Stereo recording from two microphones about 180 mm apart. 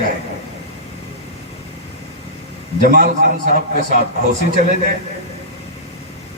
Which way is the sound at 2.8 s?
50° right (ahead or behind).